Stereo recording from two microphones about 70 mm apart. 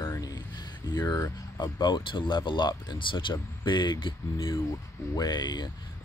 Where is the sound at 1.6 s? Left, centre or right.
Left.